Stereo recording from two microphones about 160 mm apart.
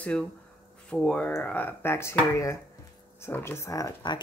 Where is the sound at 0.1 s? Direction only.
5° left (ahead or behind).